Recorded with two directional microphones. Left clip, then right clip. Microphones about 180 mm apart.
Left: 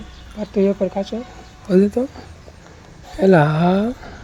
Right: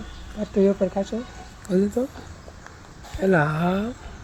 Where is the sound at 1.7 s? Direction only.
45° left (ahead or behind).